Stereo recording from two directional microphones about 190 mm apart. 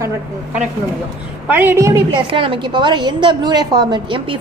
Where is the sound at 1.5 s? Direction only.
10° right (ahead or behind).